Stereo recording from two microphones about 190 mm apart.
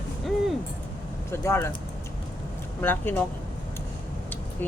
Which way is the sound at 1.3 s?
15° left (ahead or behind).